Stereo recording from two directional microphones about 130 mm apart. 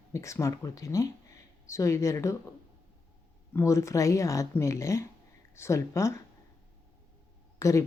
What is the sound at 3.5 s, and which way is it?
Speech, 25° left (ahead or behind).